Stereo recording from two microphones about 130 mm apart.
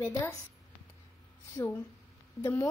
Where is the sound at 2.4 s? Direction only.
20° left (ahead or behind).